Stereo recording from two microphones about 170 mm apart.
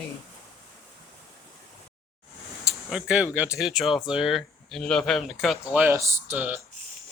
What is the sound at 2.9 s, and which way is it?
Speech, 5° right (ahead or behind).